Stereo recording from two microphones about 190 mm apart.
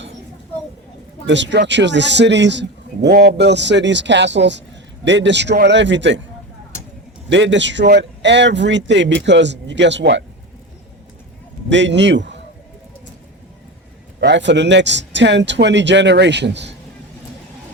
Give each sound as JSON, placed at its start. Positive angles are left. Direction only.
{"t": 1.3, "sound": "a man's voice", "side_deg": -70}
{"t": 7.3, "sound": "a man's voice", "side_deg": -70}
{"t": 11.7, "sound": "a man's voice", "side_deg": -70}
{"t": 14.2, "sound": "a man's voice", "side_deg": -65}